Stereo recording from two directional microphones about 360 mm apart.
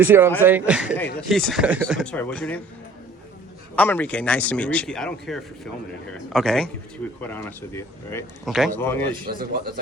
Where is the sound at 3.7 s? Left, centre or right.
Centre.